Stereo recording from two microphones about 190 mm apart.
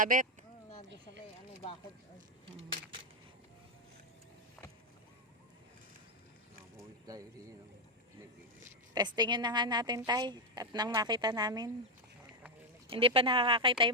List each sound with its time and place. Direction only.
0.0 s speech: 45° right (ahead or behind)
7.0 s speech: 20° right (ahead or behind)
9.0 s a woman's voice: 20° right (ahead or behind)
12.9 s a woman's voice: 30° right (ahead or behind)